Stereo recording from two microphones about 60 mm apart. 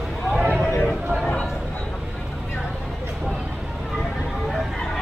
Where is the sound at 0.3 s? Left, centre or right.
Centre.